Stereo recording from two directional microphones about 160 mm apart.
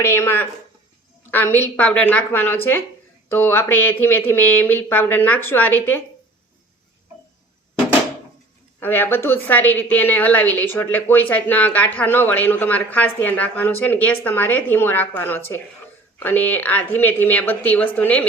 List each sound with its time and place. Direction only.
0.0 s speech: 15° left (ahead or behind)
8.8 s speech: 15° left (ahead or behind)